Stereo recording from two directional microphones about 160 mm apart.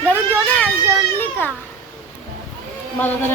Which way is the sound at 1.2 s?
15° left (ahead or behind).